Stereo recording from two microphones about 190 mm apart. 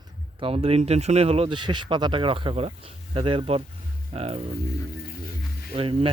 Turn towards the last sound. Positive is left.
turn(degrees=-30)  # may be behind; listen again after turning